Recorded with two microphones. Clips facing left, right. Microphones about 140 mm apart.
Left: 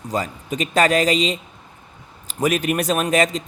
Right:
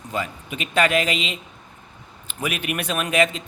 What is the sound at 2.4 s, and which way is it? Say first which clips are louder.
Speech: left 7 dB; 40° left (ahead or behind).